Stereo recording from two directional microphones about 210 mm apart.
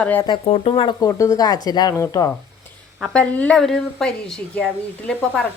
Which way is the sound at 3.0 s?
5° left (ahead or behind).